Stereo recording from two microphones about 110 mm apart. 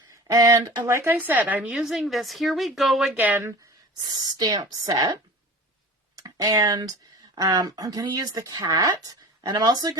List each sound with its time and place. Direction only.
0.3 s a woman's voice: 30° right (ahead or behind); by 3.1 s centre (ahead or behind)
3.1 s speech: 15° right (ahead or behind)
4.0 s speech: 35° right (ahead or behind)
6.1 s speech: 30° right (ahead or behind)